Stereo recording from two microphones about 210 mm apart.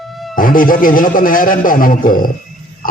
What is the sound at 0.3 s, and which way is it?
A man's voice, 40° left (ahead or behind).